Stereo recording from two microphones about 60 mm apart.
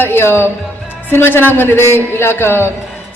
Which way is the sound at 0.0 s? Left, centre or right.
Left.